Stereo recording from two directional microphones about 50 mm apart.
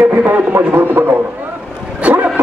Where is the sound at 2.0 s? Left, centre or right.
Right.